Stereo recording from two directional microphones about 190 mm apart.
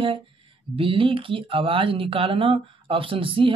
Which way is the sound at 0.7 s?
30° right (ahead or behind).